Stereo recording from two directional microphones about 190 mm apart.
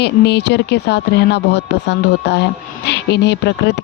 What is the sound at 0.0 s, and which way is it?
A woman's voice, 60° left (ahead or behind).